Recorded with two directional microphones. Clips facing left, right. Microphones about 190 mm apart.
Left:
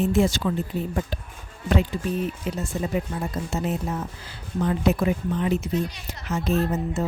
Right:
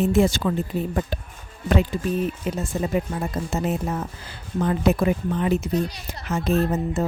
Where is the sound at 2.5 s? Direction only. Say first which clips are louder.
Right 2 dB; 50° right (ahead or behind).